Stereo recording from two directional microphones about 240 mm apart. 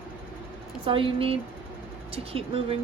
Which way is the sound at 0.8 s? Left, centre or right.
Right.